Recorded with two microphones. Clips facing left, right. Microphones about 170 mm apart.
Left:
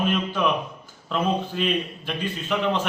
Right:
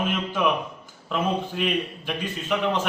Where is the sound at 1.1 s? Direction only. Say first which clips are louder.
Left 1 dB; 10° right (ahead or behind).